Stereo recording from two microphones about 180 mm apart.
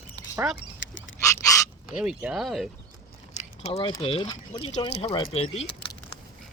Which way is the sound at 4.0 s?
30° left (ahead or behind).